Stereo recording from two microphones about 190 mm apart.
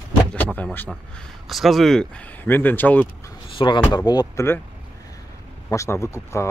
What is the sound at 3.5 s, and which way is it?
Speech, 25° left (ahead or behind).